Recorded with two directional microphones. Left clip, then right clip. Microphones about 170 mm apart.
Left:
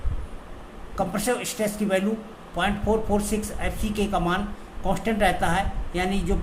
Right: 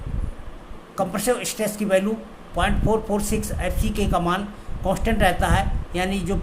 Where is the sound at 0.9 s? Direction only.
20° right (ahead or behind).